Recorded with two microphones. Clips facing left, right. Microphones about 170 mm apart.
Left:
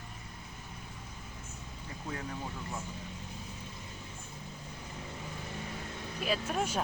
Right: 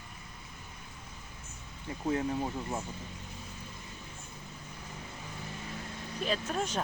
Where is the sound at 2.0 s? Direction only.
30° right (ahead or behind).